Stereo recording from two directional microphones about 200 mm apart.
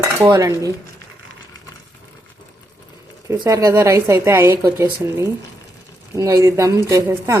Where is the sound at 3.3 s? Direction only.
15° right (ahead or behind).